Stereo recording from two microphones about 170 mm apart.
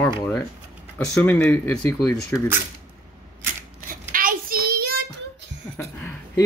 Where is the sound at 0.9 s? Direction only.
10° left (ahead or behind).